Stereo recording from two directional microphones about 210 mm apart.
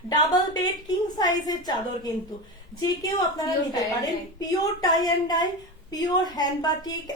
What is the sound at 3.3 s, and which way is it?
A woman's voice, 15° left (ahead or behind).